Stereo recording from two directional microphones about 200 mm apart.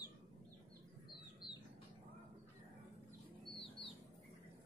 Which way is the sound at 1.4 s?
25° left (ahead or behind).